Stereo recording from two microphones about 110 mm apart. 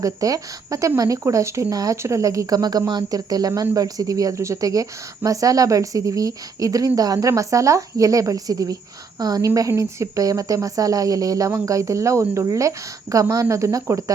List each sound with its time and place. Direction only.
0.0 s speech: 30° right (ahead or behind)